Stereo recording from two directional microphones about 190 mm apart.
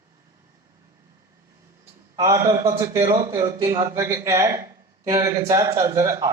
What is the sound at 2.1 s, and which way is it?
A man's voice, 15° right (ahead or behind).